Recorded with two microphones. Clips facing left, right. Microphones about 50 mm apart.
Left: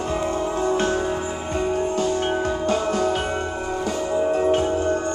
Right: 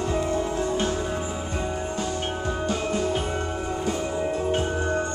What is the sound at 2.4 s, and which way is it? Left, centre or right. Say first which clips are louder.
Music: left 5 dB; left.